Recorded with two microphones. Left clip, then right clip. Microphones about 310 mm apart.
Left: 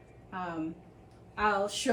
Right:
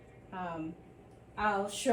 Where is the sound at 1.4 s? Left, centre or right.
Centre.